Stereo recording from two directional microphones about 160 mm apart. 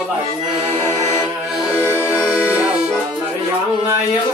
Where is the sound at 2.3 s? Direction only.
10° right (ahead or behind).